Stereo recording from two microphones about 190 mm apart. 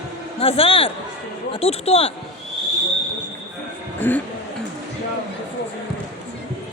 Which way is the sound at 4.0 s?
10° left (ahead or behind).